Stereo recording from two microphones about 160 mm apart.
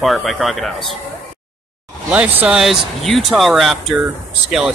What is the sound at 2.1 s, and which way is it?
Speech, 10° right (ahead or behind).